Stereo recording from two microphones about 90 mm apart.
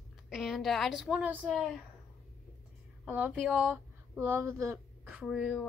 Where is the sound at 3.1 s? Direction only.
15° right (ahead or behind).